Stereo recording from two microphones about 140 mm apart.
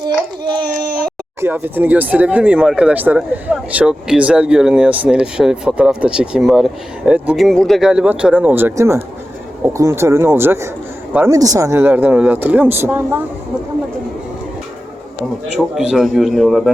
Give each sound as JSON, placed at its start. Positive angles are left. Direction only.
{"t": 0.5, "sound": "a sound", "side_deg": -30}
{"t": 1.4, "sound": "speech", "side_deg": -15}
{"t": 15.5, "sound": "a man's voice", "side_deg": -5}